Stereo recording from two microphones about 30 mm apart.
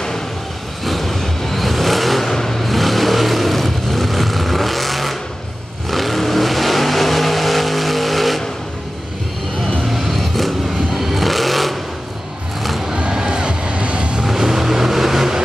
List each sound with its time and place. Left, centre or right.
0.8 s vehicle: centre
9.9 s vehicle: centre
13.1 s music: centre
13.4 s music: right
14.2 s vehicle: centre